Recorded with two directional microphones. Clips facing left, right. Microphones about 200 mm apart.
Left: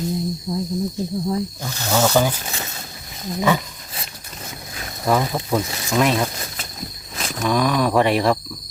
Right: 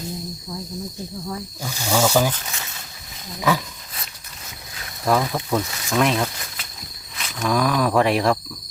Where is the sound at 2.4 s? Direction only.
35° left (ahead or behind).